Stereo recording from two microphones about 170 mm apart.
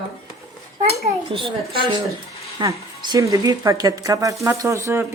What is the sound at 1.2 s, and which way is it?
Speech, 30° right (ahead or behind).